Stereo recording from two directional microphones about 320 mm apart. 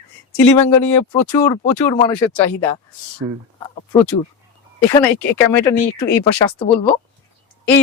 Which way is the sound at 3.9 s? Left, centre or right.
Centre.